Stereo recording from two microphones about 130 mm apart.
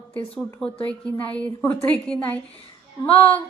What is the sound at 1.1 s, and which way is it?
Speech, 10° left (ahead or behind).